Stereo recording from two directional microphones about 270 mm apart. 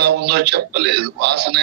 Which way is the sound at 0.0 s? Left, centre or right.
Right.